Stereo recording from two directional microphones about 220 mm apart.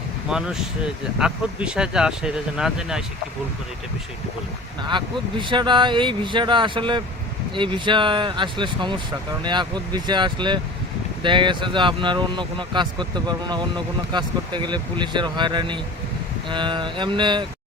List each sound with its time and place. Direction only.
0.3 s speech: 5° right (ahead or behind)
4.8 s speech: 20° right (ahead or behind)